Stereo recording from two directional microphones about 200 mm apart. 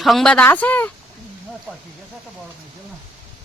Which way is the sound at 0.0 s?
Centre (ahead or behind).